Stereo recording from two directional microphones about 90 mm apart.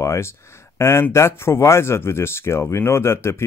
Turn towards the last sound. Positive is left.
turn(degrees=30)  # may be behind; listen again after turning